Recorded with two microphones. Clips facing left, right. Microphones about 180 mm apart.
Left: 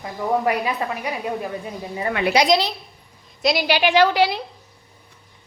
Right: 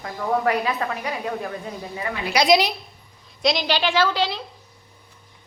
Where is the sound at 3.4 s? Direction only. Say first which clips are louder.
Left 2 dB; 5° left (ahead or behind).